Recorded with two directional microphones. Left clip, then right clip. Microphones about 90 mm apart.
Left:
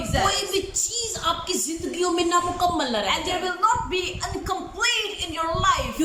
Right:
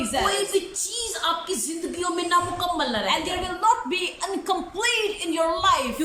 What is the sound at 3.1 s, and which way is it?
A woman's voice, 40° right (ahead or behind).